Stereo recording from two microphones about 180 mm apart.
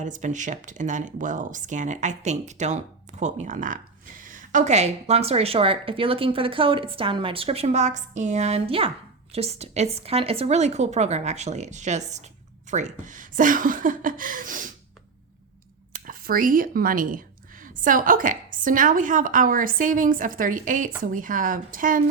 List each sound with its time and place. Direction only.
0.0 s a woman's voice: 45° right (ahead or behind)
16.0 s a woman's voice: 50° right (ahead or behind)